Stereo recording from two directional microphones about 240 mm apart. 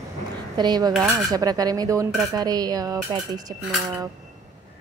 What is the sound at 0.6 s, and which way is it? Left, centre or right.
Speech, centre.